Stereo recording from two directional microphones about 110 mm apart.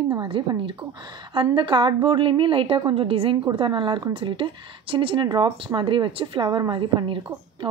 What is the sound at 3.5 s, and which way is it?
Speech, 45° right (ahead or behind).